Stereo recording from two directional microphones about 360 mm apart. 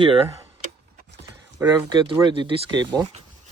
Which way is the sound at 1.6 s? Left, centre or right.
Centre.